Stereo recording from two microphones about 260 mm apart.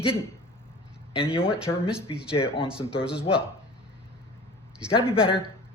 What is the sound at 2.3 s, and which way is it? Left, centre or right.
Speech, left.